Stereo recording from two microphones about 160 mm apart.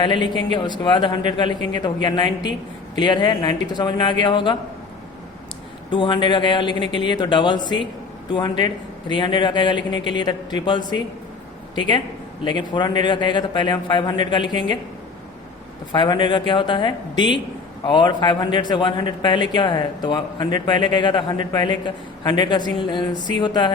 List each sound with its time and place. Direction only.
0.0 s a man's voice: 30° left (ahead or behind)
5.9 s a man's voice: 30° left (ahead or behind)
15.9 s a man's voice: 30° left (ahead or behind)